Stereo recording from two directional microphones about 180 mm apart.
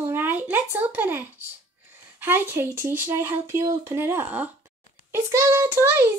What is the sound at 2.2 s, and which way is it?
A child's voice, 10° right (ahead or behind).